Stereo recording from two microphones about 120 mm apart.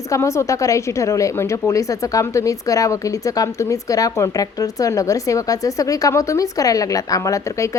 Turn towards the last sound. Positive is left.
turn(degrees=25)  # may be behind; listen again after turning